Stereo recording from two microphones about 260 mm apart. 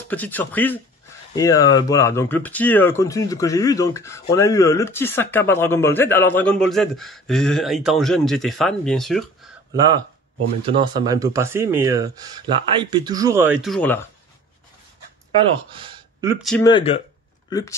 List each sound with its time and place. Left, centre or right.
0.1 s speech: centre
9.8 s speech: centre
15.3 s speech: centre
16.6 s speech: centre